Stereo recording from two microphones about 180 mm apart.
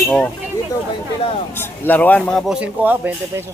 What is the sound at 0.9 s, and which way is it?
Speech, 30° left (ahead or behind).